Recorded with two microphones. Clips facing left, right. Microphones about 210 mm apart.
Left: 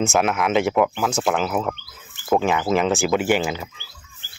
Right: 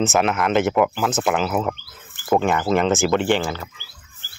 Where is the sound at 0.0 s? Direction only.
Centre (ahead or behind); by 4.3 s 15° left (ahead or behind).